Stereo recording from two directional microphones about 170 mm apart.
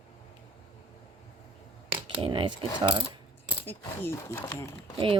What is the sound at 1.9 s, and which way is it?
Speech, 30° right (ahead or behind).